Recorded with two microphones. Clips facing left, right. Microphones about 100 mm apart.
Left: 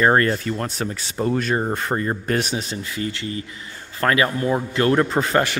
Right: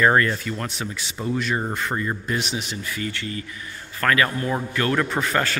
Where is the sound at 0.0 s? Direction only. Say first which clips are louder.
Left 2 dB; 40° left (ahead or behind).